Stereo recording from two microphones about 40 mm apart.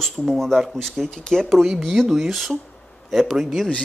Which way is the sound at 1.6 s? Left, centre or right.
Centre.